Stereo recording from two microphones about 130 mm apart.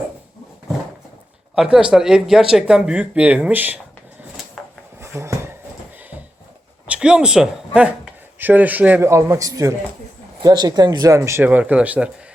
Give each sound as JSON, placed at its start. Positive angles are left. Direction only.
{"t": 1.5, "sound": "speech", "side_deg": -5}
{"t": 4.9, "sound": "a sound", "side_deg": -20}
{"t": 6.8, "sound": "speech", "side_deg": -10}